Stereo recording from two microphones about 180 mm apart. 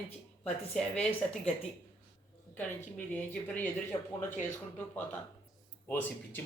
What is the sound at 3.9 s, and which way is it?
Speech, 25° left (ahead or behind).